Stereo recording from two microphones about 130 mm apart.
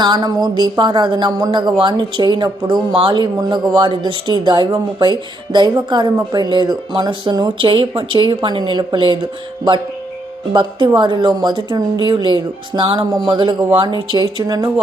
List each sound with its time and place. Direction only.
0.0 s a woman's voice: 35° right (ahead or behind)
10.5 s a woman's voice: 35° right (ahead or behind)